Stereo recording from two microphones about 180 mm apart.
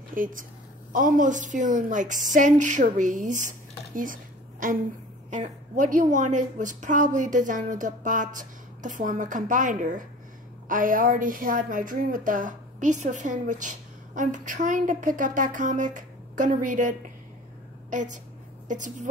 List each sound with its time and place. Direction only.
0.1 s a woman's voice: 50° right (ahead or behind)